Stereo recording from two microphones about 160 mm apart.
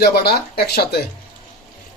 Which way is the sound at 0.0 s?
80° left.